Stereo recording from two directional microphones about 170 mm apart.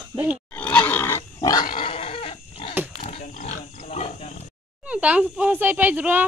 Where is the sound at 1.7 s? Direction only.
35° left (ahead or behind).